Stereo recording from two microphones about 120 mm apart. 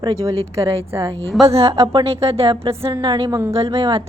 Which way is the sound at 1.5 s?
55° right (ahead or behind).